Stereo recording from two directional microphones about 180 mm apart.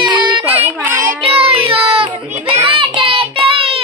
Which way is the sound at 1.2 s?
35° right (ahead or behind).